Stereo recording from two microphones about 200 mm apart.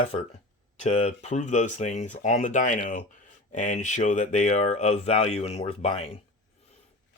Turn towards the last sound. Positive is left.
turn(degrees=30)  # may be behind; listen again after turning